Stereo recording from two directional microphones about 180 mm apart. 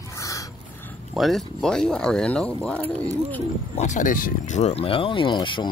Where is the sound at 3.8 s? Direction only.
45° left (ahead or behind); by 5.6 s 25° left (ahead or behind).